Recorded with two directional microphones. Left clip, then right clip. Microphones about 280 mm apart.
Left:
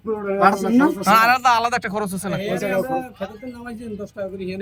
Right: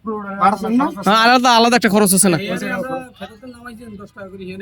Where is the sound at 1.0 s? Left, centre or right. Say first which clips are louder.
Right 4 dB; right.